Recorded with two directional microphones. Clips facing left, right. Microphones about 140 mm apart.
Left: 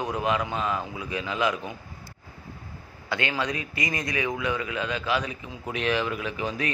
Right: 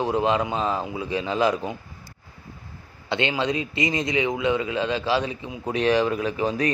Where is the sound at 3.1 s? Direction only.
25° right (ahead or behind).